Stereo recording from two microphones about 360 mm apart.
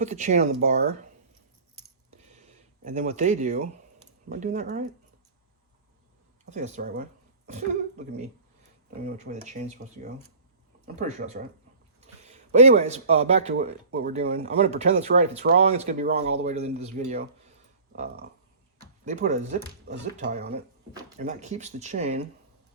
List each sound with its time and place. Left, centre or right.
0.0 s speech: centre
2.8 s speech: centre
6.4 s a woman's voice: centre
12.5 s speech: centre